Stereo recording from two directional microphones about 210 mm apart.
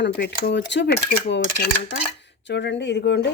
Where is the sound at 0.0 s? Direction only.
55° left (ahead or behind).